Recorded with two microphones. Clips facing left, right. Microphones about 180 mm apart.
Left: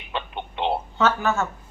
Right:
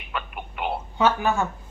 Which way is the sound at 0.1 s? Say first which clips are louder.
Left 2 dB; 25° left (ahead or behind).